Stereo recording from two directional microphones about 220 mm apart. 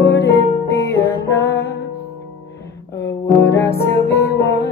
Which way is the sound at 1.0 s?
15° left (ahead or behind).